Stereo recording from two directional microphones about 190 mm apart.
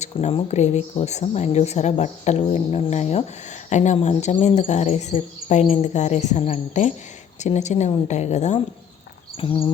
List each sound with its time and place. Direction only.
0.0 s speech: 35° left (ahead or behind)